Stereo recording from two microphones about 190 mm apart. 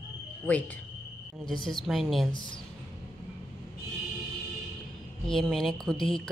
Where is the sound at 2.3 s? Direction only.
25° left (ahead or behind).